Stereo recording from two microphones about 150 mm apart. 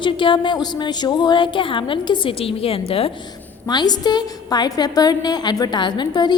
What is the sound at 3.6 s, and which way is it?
A woman's voice, 25° left (ahead or behind).